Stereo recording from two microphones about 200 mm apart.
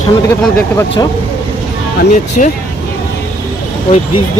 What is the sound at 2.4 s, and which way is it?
Speech, 40° left (ahead or behind).